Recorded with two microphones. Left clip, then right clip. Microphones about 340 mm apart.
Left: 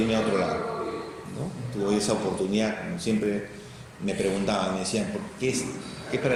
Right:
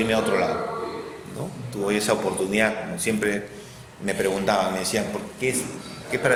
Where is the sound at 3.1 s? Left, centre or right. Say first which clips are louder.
Right 3 dB; right.